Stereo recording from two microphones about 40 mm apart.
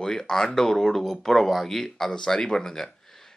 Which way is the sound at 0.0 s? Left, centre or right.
Centre.